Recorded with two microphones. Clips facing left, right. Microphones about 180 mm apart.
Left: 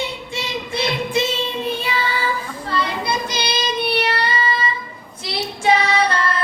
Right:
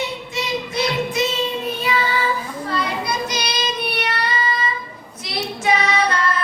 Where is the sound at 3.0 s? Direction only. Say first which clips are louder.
Left 1 dB; 30° left (ahead or behind).